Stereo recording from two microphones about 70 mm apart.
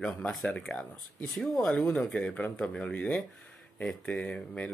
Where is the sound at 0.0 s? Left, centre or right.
Centre.